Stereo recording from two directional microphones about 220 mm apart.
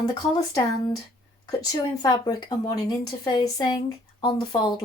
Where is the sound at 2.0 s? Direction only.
20° left (ahead or behind).